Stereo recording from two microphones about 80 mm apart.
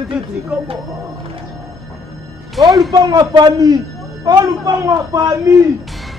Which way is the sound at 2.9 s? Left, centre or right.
Right.